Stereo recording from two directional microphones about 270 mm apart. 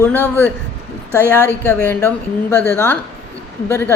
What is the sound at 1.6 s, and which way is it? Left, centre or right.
A woman's voice, centre.